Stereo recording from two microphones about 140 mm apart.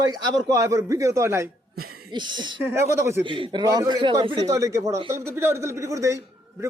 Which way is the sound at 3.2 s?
35° right (ahead or behind).